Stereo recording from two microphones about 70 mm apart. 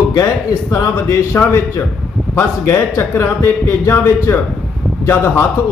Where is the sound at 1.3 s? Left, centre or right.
Left.